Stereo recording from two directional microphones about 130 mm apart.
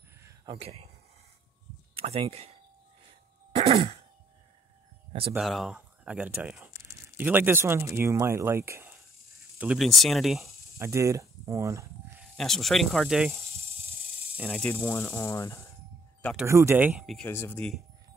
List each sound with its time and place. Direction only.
0.5 s speech: 50° right (ahead or behind)
2.0 s speech: 50° right (ahead or behind)
3.5 s throat clearing: 55° right (ahead or behind)
5.4 s speech: centre (ahead or behind)
6.7 s a sound: 25° right (ahead or behind)
7.2 s speech: 15° right (ahead or behind)
9.6 s speech: 5° right (ahead or behind)
10.8 s speech: 20° right (ahead or behind)
12.4 s speech: 5° left (ahead or behind)
14.5 s speech: 10° left (ahead or behind)
14.9 s speech: 25° left (ahead or behind)
16.4 s speech: 20° right (ahead or behind)
17.0 s speech: centre (ahead or behind)
17.3 s speech: 15° left (ahead or behind)